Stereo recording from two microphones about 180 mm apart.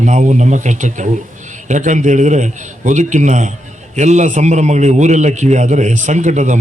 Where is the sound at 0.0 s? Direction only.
40° right (ahead or behind).